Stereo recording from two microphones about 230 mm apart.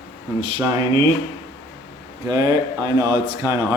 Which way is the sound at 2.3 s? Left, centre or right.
Centre.